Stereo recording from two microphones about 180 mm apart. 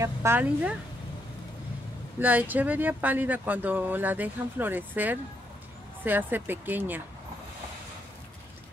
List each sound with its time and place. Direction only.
0.0 s speech: 15° right (ahead or behind)
2.1 s speech: 10° right (ahead or behind)